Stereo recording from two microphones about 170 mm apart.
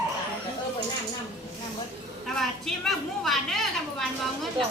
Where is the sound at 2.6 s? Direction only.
Centre (ahead or behind).